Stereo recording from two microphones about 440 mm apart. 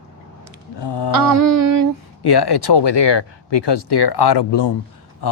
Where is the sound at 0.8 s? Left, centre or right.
Left.